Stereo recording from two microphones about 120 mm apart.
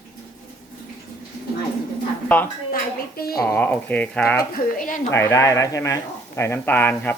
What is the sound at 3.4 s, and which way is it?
Speech, 10° left (ahead or behind).